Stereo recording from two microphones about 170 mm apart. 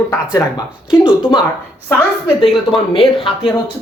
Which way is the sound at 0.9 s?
5° right (ahead or behind).